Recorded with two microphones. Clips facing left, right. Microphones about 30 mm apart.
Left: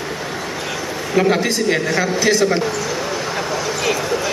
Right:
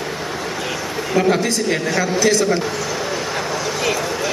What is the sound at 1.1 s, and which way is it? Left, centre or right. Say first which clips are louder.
A man's voice: left 1 dB; centre.